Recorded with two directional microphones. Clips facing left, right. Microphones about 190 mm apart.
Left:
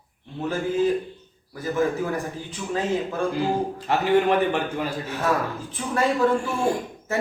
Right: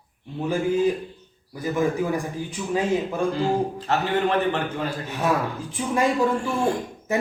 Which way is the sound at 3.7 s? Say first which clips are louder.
Left 3 dB; 15° left (ahead or behind).